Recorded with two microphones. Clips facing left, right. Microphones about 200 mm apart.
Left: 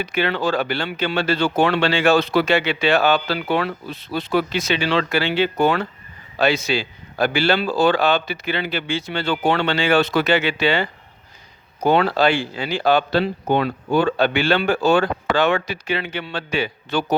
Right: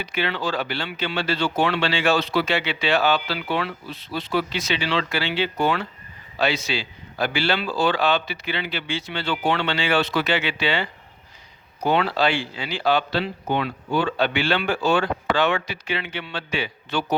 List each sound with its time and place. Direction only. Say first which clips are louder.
0.0 s speech: left 5 dB; 50° left (ahead or behind)